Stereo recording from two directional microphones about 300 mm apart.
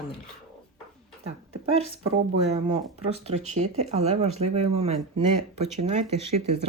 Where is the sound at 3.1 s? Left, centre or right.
Right.